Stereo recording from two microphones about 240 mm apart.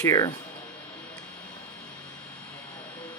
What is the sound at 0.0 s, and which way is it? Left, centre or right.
Speech, centre.